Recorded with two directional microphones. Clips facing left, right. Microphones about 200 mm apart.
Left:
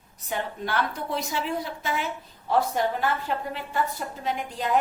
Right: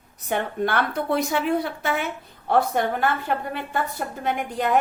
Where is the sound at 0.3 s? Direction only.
60° right (ahead or behind).